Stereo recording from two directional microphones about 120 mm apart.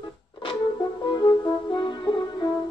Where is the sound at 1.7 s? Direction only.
45° left (ahead or behind).